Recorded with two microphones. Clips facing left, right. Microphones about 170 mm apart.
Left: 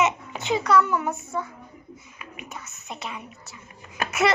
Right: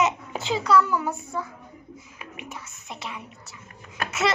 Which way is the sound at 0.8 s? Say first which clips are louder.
Left 1 dB; 20° left (ahead or behind).